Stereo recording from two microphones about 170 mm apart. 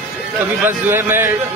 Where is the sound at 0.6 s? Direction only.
15° right (ahead or behind).